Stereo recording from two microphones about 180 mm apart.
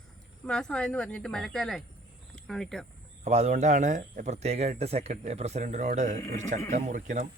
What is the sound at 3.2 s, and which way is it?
Speech, 40° right (ahead or behind).